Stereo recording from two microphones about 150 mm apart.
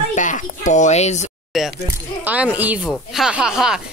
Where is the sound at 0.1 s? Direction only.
55° left (ahead or behind).